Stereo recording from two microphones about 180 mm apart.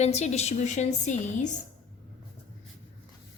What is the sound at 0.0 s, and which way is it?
A woman's voice, 35° left (ahead or behind).